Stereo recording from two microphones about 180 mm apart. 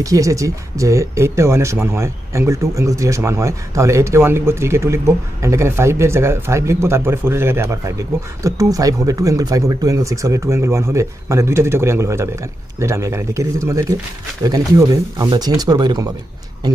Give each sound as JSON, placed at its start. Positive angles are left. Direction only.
{"t": 0.0, "sound": "speech", "side_deg": -20}